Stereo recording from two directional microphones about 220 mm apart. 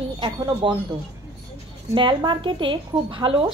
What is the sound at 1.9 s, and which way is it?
A woman's voice, 20° right (ahead or behind).